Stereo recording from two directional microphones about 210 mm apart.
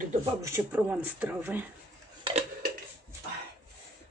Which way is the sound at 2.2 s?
30° right (ahead or behind).